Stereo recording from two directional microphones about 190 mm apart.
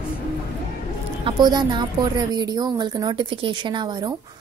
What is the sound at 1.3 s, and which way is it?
Speech, 20° right (ahead or behind).